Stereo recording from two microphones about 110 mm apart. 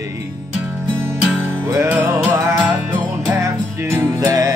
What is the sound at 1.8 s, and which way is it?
Music, 15° right (ahead or behind).